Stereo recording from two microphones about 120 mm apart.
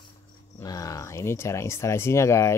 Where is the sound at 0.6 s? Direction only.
30° left (ahead or behind).